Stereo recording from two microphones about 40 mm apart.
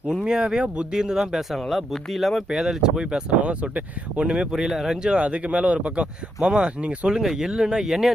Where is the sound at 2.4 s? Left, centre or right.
Centre.